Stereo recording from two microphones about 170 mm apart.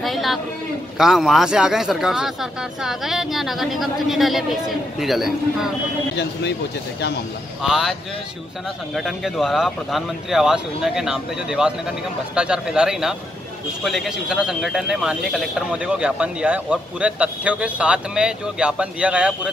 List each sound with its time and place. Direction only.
0.0 s a sound: centre (ahead or behind)
0.9 s a man's voice: centre (ahead or behind)
7.6 s a man's voice: 5° right (ahead or behind)
8.9 s a man's voice: centre (ahead or behind)